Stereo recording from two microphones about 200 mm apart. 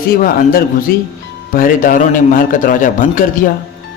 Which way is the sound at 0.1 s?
45° left (ahead or behind).